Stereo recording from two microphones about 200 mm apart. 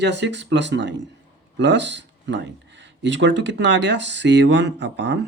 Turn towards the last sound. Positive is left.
turn(degrees=-60)  # may be behind; listen again after turning